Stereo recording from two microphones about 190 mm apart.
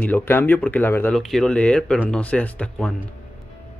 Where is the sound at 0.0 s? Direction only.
10° left (ahead or behind).